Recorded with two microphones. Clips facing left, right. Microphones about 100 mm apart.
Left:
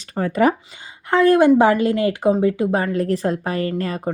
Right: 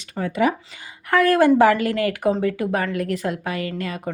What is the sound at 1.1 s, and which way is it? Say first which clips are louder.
Speech: left 3 dB; 20° left (ahead or behind).